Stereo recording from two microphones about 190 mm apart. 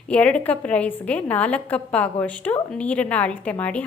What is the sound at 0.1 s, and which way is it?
A woman's voice, 5° left (ahead or behind).